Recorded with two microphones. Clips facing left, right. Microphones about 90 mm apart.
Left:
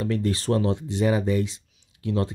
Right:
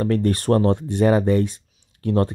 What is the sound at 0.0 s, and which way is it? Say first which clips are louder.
Speech: right 5 dB; 55° right (ahead or behind).